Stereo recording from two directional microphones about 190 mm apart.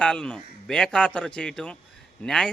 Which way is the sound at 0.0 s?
5° left (ahead or behind).